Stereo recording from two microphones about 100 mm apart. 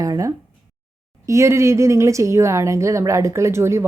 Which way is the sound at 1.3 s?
30° right (ahead or behind).